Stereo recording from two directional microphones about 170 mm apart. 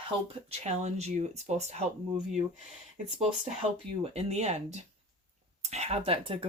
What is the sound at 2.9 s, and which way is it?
Speech, 40° right (ahead or behind).